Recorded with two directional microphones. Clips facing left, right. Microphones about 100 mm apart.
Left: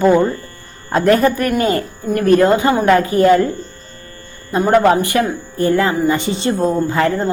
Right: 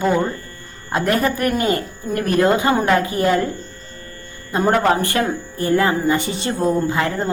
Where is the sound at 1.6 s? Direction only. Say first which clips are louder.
Left 3 dB; 30° left (ahead or behind).